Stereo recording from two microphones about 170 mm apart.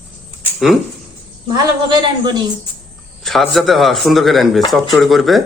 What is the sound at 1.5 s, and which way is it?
Speech, 25° right (ahead or behind).